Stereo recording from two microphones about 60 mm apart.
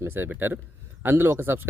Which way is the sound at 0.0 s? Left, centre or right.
Right.